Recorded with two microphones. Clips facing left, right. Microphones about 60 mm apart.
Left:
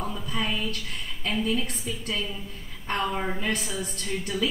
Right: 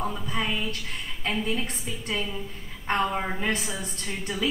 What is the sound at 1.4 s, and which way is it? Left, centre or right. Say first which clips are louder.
A woman's voice: left 2 dB; right.